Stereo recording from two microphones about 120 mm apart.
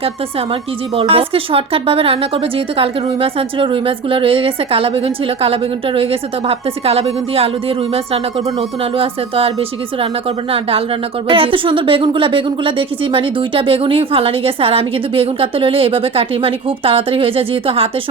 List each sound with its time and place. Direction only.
0.9 s speech: 50° right (ahead or behind)